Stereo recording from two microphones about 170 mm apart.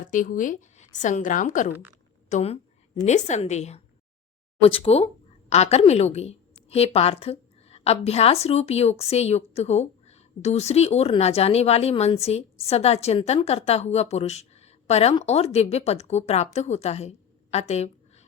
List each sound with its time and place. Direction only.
0.1 s a woman's voice: 50° left (ahead or behind)
2.3 s a woman's voice: 35° left (ahead or behind)